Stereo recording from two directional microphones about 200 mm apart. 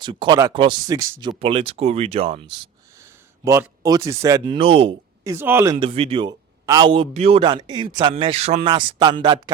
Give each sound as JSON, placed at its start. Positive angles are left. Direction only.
{"t": 0.0, "sound": "a man's voice", "side_deg": -25}
{"t": 3.0, "sound": "speech", "side_deg": -15}
{"t": 5.2, "sound": "speech", "side_deg": -10}
{"t": 5.7, "sound": "a man's voice", "side_deg": -30}